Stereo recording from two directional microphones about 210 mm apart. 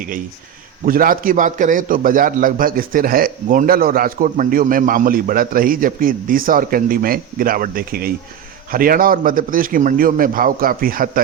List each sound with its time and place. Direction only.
0.9 s a man's voice: 40° right (ahead or behind)